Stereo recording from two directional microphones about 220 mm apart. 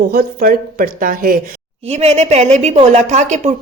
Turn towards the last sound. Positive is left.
turn(degrees=-30)  # may be behind; listen again after turning